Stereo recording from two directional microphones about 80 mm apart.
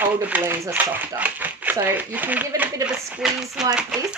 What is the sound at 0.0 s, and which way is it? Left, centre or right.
Speech, centre.